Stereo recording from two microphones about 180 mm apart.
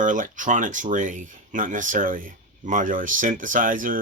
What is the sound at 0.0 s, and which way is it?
Speech, 45° right (ahead or behind).